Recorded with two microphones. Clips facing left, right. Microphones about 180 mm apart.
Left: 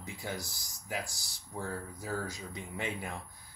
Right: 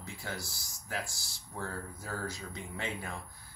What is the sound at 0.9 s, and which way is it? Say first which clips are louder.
Speech: left 1 dB; 15° left (ahead or behind).